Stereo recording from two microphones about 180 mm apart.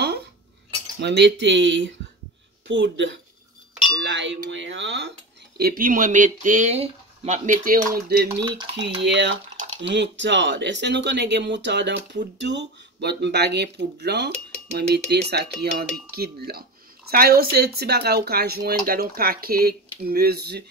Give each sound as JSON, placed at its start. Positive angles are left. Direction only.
{"t": 1.0, "sound": "speech", "side_deg": -75}
{"t": 5.6, "sound": "speech", "side_deg": -55}
{"t": 9.0, "sound": "speech", "side_deg": -75}